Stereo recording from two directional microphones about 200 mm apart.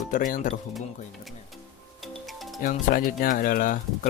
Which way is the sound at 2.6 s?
45° left (ahead or behind).